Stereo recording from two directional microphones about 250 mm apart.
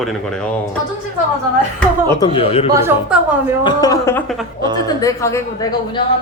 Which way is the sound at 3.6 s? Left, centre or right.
Centre.